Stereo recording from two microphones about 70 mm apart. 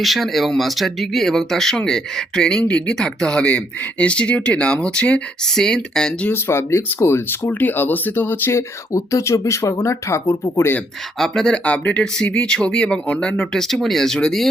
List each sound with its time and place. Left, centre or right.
0.0 s speech: centre
6.2 s speech: left
8.5 s speech: left
11.2 s speech: centre